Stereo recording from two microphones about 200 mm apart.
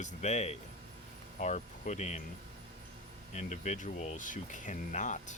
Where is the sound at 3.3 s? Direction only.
35° left (ahead or behind).